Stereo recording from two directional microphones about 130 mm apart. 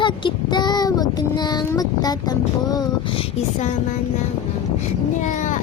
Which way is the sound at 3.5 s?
65° left (ahead or behind).